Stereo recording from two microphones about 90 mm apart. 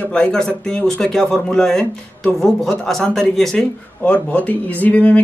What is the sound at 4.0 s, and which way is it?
A man's voice, 15° left (ahead or behind).